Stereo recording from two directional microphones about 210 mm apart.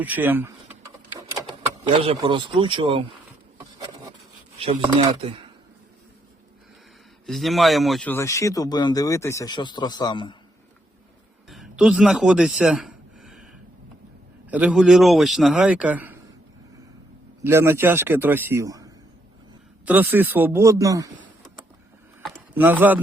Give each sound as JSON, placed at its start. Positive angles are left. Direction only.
{"t": 0.0, "sound": "speech", "side_deg": -10}
{"t": 1.9, "sound": "speech", "side_deg": -25}
{"t": 4.5, "sound": "speech", "side_deg": -25}
{"t": 7.3, "sound": "speech", "side_deg": 0}
{"t": 11.4, "sound": "a sound", "side_deg": 0}
{"t": 14.5, "sound": "a man's voice", "side_deg": -5}
{"t": 17.4, "sound": "a man's voice", "side_deg": -10}
{"t": 22.3, "sound": "a sound", "side_deg": -10}